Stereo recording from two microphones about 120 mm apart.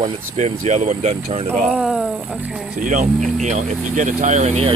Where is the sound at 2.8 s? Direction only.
90° right.